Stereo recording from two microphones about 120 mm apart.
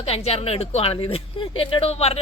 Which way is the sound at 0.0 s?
60° left (ahead or behind).